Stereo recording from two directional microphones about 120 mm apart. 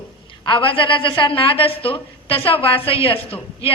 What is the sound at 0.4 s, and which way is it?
A woman's voice, 45° left (ahead or behind).